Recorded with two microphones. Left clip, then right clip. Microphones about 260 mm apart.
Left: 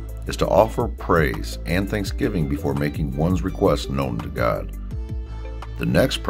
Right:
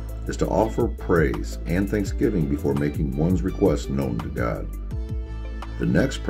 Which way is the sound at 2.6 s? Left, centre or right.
Left.